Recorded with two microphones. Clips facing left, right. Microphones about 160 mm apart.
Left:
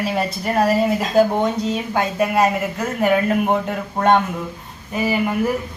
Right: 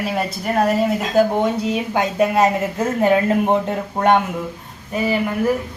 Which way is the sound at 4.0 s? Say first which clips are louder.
Even; 15° right (ahead or behind).